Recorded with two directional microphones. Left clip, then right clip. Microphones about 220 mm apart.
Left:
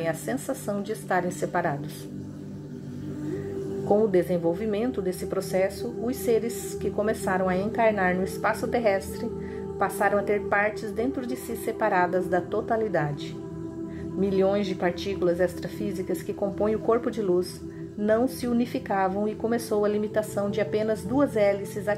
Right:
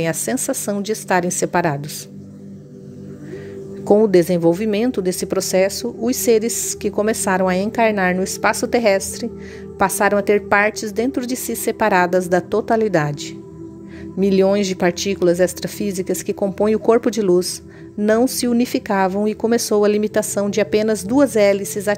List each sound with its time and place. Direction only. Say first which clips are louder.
0.0 s speech: right 8 dB; 40° right (ahead or behind)
3.9 s speech: right 9 dB; 40° right (ahead or behind)
14.2 s speech: right 8 dB; 40° right (ahead or behind)